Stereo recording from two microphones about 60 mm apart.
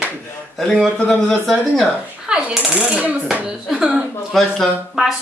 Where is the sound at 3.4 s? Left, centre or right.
Centre.